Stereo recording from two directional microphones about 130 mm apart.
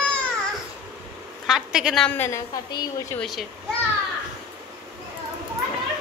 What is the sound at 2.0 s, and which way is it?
Speech, 15° left (ahead or behind).